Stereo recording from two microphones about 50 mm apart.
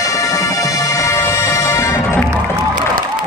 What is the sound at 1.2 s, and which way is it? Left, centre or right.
Music, left.